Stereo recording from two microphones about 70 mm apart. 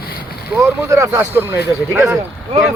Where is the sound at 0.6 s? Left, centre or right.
Right.